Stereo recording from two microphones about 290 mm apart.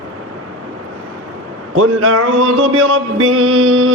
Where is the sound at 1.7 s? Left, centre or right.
Right.